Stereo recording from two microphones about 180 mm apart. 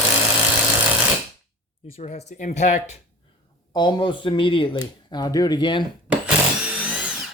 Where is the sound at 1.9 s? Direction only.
40° left (ahead or behind).